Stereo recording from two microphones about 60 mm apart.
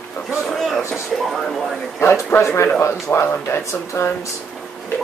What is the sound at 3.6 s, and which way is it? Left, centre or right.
Speech, left.